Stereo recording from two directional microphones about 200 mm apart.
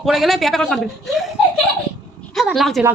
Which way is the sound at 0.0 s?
Centre (ahead or behind).